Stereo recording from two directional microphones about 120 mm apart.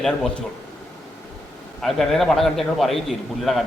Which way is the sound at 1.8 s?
Centre (ahead or behind).